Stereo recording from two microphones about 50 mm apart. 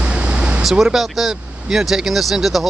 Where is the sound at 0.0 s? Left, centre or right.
Right.